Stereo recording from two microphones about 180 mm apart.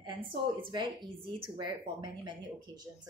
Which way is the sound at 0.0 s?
30° right (ahead or behind).